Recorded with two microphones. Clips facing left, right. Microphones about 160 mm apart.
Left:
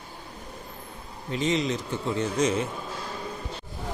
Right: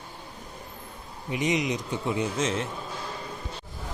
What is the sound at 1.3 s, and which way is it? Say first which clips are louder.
Speech: left 1 dB; 15° right (ahead or behind).